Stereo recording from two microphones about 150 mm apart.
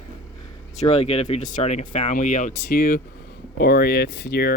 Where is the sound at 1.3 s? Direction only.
55° left (ahead or behind).